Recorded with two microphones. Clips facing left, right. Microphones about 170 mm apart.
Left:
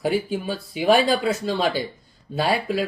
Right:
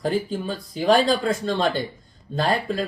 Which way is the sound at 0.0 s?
5° left (ahead or behind).